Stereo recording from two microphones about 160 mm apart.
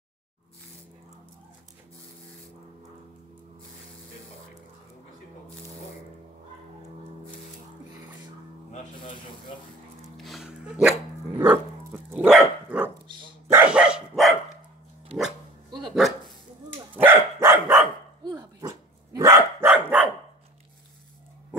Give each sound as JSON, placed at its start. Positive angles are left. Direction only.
{"t": 10.1, "sound": "music", "side_deg": 0}
{"t": 11.4, "sound": "dog", "side_deg": -15}
{"t": 16.9, "sound": "dog", "side_deg": -15}
{"t": 19.7, "sound": "dog", "side_deg": -10}